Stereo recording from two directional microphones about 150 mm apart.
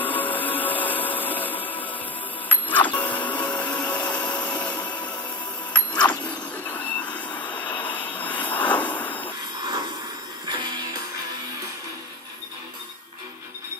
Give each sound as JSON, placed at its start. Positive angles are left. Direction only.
{"t": 0.0, "sound": "music", "side_deg": 10}
{"t": 2.4, "sound": "printer", "side_deg": 10}
{"t": 5.7, "sound": "a sound", "side_deg": 10}
{"t": 7.2, "sound": "vehicle", "side_deg": 30}
{"t": 8.2, "sound": "vehicle", "side_deg": 10}
{"t": 10.5, "sound": "music", "side_deg": -30}